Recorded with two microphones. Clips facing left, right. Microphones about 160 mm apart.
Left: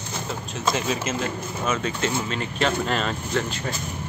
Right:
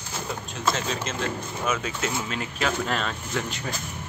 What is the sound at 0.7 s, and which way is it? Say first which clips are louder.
Speech: left 4 dB; 10° left (ahead or behind).